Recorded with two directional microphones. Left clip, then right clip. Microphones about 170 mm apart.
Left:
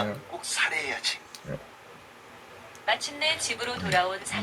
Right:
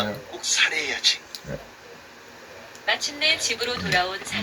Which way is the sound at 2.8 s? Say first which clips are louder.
Right 4 dB; 10° right (ahead or behind).